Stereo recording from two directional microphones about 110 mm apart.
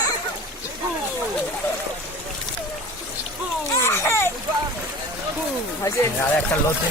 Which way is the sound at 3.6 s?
25° left (ahead or behind).